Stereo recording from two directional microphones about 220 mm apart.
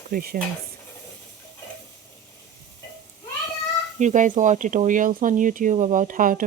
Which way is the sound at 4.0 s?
35° right (ahead or behind).